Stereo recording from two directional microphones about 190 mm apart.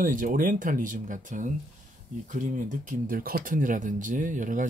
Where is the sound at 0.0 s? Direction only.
45° right (ahead or behind).